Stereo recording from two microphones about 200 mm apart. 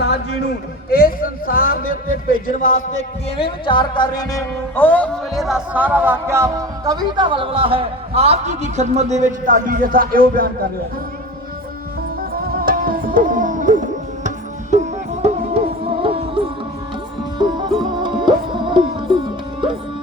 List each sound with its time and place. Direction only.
0.9 s speech: 45° left (ahead or behind)
3.3 s music: 25° left (ahead or behind); by 10.7 s 45° right (ahead or behind)
12.5 s music: 45° right (ahead or behind); by 19.2 s 25° right (ahead or behind)